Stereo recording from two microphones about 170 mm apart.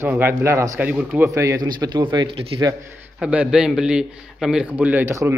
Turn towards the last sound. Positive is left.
turn(degrees=-15)  # may be behind; listen again after turning